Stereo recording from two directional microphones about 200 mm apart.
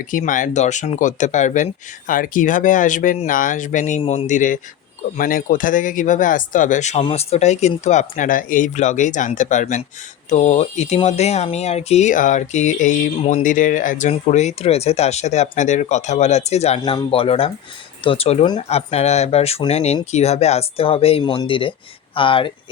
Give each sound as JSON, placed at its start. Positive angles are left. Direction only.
{"t": 0.0, "sound": "speech", "side_deg": 40}